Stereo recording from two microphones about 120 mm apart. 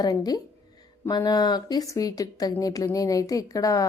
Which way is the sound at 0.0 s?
35° left (ahead or behind).